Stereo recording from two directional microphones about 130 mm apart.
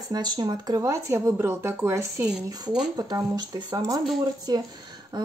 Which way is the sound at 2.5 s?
30° right (ahead or behind).